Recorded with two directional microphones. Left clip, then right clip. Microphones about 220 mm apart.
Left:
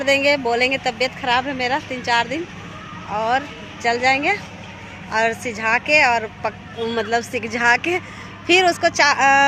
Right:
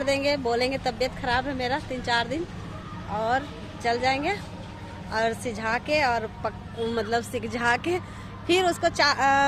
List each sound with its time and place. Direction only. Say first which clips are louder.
0.0 s a woman's voice: left 8 dB; 20° left (ahead or behind)
5.1 s speech: left 7 dB; 10° left (ahead or behind)